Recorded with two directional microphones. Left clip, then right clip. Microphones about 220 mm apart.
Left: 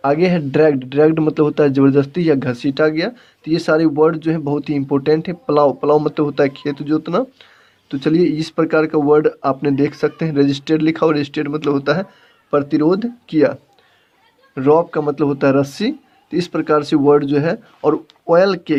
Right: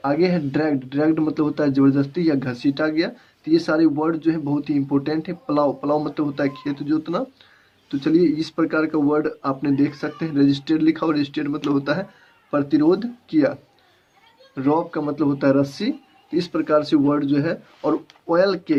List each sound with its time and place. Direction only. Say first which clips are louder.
0.0 s a man's voice: left 5 dB; 45° left (ahead or behind)